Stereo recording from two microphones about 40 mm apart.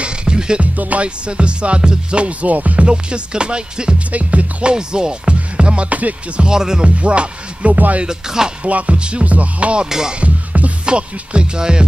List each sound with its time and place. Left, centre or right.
0.0 s music: right
0.6 s music: right
1.0 s music: right
2.9 s music: right
4.1 s music: right
4.7 s music: centre; by 6.4 s right
6.4 s speech: centre
7.0 s music: right
7.7 s speech: right
8.0 s speech: centre
8.6 s music: right
9.8 s speech: centre
10.2 s music: right
10.9 s music: right